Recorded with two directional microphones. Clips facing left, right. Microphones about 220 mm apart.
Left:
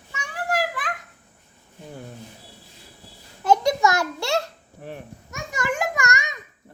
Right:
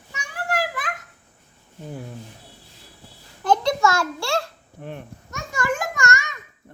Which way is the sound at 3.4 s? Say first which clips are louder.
Left 1 dB; 20° left (ahead or behind).